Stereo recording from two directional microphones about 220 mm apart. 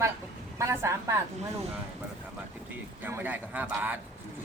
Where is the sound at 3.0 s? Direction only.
10° right (ahead or behind).